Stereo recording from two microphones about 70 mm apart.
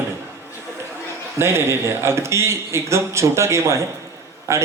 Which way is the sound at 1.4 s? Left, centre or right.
Right.